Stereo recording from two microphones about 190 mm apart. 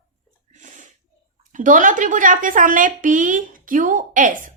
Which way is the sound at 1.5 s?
45° right (ahead or behind).